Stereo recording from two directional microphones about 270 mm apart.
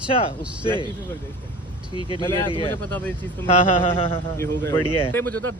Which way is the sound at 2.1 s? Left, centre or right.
Centre.